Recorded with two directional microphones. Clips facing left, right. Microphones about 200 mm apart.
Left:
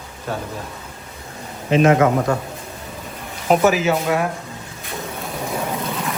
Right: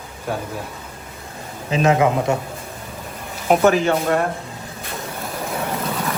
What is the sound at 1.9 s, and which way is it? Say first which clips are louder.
Speech: left 1 dB; 20° right (ahead or behind).